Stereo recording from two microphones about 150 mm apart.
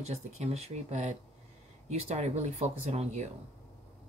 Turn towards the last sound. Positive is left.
turn(degrees=-50)  # may be behind; listen again after turning